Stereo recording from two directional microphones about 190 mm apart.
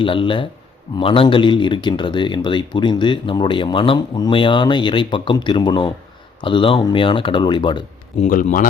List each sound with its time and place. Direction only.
0.0 s speech: 25° left (ahead or behind)
8.2 s a man's voice: 40° left (ahead or behind)